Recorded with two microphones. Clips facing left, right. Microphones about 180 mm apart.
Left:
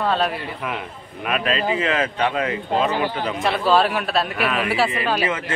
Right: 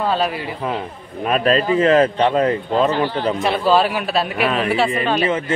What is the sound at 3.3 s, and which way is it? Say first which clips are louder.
A man's voice: right 1 dB; centre (ahead or behind).